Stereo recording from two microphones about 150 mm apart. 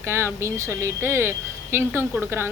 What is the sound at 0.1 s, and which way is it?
Speech, 15° right (ahead or behind).